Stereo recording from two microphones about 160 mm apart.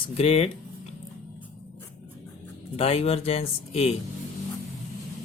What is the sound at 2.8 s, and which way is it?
Speech, 40° left (ahead or behind).